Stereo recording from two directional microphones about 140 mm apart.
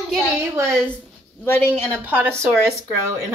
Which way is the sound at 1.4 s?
15° left (ahead or behind).